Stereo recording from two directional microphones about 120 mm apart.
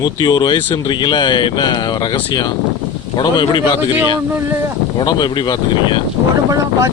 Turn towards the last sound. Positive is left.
turn(degrees=-25)  # may be behind; listen again after turning